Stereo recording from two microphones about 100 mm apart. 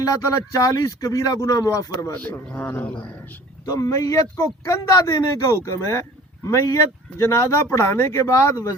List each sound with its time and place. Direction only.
0.0 s speech: 35° left (ahead or behind)
2.1 s speech: 15° left (ahead or behind)
3.7 s speech: 35° left (ahead or behind)